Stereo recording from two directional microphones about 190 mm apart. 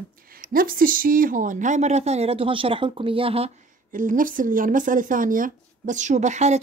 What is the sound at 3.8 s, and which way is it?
Speech, 45° right (ahead or behind).